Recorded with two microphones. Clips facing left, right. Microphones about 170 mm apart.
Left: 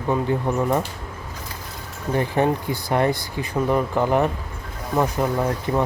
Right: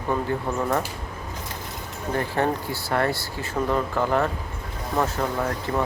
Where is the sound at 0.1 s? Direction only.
15° left (ahead or behind).